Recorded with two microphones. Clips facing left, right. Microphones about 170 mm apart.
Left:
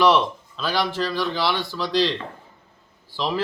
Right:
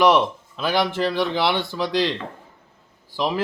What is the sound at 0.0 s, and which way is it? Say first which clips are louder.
Speech: right 1 dB; 15° right (ahead or behind).